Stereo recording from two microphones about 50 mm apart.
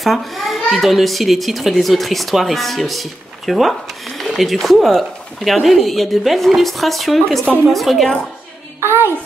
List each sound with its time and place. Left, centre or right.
0.0 s a child's voice: centre
8.8 s a child's voice: right